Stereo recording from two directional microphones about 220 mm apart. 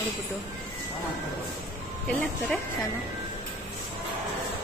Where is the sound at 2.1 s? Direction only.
5° left (ahead or behind).